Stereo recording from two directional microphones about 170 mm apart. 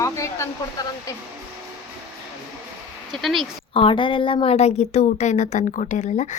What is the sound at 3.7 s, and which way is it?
Speech, 30° left (ahead or behind).